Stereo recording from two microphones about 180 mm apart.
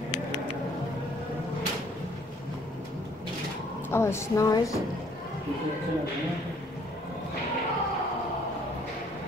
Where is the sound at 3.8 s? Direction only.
15° left (ahead or behind).